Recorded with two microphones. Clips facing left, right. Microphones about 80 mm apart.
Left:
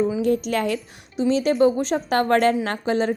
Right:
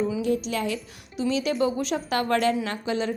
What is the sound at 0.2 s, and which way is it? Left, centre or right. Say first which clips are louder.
Speech: left 4 dB; left.